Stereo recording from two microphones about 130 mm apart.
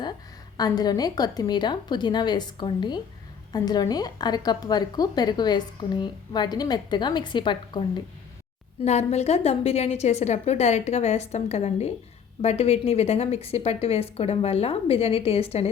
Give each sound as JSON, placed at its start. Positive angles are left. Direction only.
{"t": 0.5, "sound": "a woman's voice", "side_deg": 30}
{"t": 8.8, "sound": "a woman's voice", "side_deg": 55}